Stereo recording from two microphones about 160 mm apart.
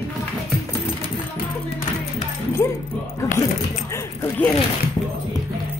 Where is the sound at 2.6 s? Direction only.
15° left (ahead or behind).